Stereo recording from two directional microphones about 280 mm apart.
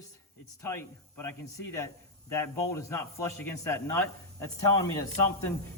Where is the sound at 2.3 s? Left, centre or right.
Centre.